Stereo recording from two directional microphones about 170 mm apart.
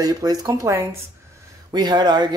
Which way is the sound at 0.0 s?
20° right (ahead or behind).